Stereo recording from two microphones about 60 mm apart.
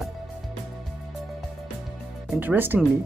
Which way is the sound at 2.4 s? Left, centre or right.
Right.